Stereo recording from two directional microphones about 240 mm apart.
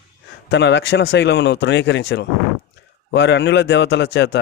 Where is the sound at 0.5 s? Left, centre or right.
Left.